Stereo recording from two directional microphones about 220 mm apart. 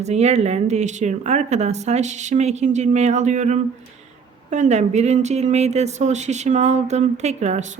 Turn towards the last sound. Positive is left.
turn(degrees=-30)  # may be behind; listen again after turning